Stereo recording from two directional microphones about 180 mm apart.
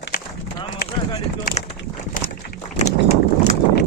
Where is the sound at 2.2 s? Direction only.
50° left (ahead or behind).